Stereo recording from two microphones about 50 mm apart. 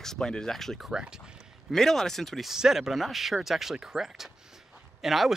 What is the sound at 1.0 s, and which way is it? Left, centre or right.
Speech, centre.